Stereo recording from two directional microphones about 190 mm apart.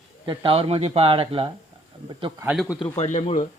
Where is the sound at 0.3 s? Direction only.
30° right (ahead or behind).